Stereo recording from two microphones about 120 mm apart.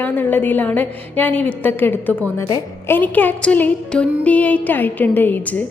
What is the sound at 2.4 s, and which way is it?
Speech, 30° left (ahead or behind).